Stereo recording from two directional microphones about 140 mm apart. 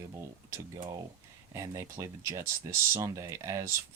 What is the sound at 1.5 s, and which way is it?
Speech, 25° right (ahead or behind).